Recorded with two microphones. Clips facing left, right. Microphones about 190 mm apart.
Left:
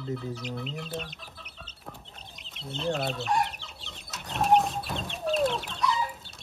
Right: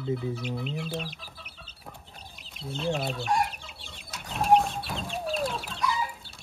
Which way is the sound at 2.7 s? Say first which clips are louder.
Even; centre (ahead or behind).